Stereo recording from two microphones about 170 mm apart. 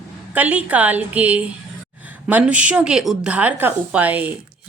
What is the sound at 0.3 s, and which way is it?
A woman's voice, 10° right (ahead or behind).